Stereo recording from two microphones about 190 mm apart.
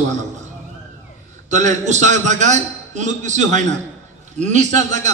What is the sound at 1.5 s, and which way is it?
A man's voice, 40° right (ahead or behind).